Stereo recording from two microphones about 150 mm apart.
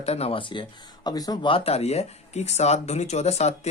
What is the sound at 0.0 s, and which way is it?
Speech, 45° left (ahead or behind).